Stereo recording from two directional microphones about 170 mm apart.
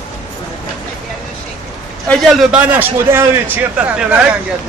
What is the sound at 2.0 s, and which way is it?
A man's voice, centre (ahead or behind).